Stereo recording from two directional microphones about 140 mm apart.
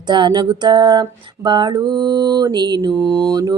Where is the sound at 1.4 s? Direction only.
30° right (ahead or behind).